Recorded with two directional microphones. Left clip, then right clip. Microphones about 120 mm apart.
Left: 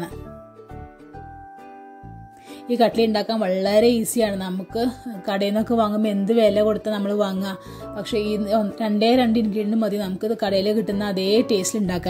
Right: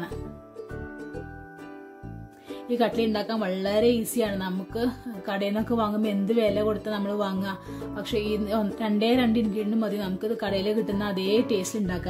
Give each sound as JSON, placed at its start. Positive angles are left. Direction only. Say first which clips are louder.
{"t": 2.7, "sound": "a woman's voice", "louder": "left 6 dB", "side_deg": 35}
{"t": 7.9, "sound": "a woman's voice", "louder": "left 4 dB", "side_deg": 30}